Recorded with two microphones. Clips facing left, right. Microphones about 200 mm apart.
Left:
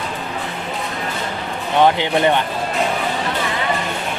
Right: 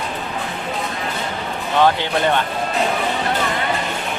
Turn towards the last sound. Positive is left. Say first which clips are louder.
# left 2 dB
turn(degrees=15)  # may be behind; listen again after turning